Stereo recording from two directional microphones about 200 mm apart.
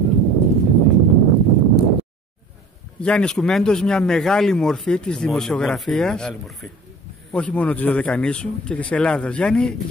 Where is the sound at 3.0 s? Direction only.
5° left (ahead or behind).